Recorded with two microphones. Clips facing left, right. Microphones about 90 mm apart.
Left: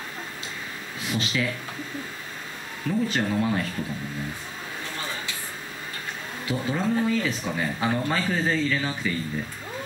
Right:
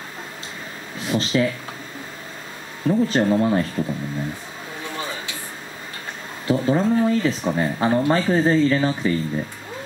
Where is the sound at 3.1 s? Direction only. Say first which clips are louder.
Right 6 dB; 35° right (ahead or behind).